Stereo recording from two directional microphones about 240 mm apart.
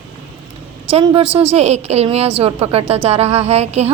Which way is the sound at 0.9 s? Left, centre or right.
Right.